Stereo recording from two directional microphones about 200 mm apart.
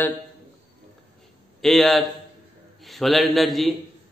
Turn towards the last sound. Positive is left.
turn(degrees=0)  # may be behind; listen again after turning